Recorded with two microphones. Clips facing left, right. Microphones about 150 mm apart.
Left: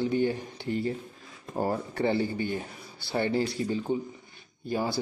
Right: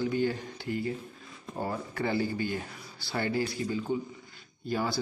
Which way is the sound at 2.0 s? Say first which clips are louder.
Left 2 dB; 25° left (ahead or behind).